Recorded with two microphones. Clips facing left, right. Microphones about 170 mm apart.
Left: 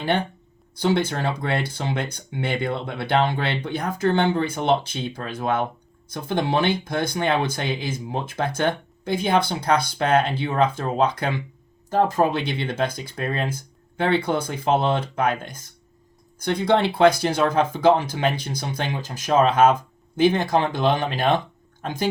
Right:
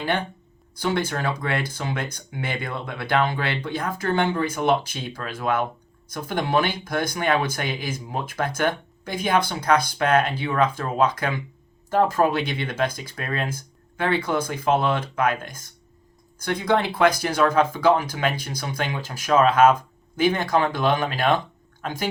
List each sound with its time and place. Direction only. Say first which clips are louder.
0.8 s speech: left 3 dB; 25° left (ahead or behind)
12.1 s speech: even; 25° left (ahead or behind)
16.6 s speech: left 3 dB; 30° left (ahead or behind)